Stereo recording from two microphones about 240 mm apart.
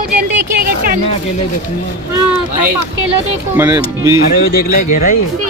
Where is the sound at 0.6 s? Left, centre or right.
Right.